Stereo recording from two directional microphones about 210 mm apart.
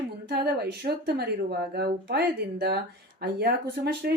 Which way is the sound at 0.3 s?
50° right (ahead or behind).